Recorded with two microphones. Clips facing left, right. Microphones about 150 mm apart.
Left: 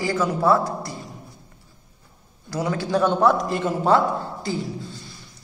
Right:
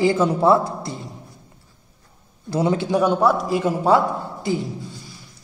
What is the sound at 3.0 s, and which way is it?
A man's voice, 5° right (ahead or behind).